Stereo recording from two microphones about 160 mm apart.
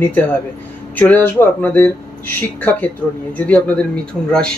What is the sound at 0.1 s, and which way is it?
Speech, 10° left (ahead or behind).